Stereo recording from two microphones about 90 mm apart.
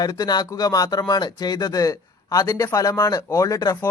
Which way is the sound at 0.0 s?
50° left (ahead or behind).